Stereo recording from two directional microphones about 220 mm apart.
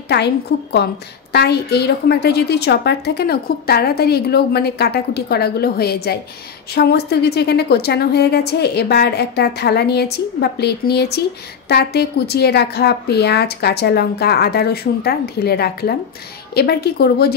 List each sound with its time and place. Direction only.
0.1 s a woman's voice: 50° left (ahead or behind)